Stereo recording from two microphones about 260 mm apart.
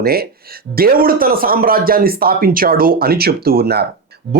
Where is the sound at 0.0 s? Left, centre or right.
Right.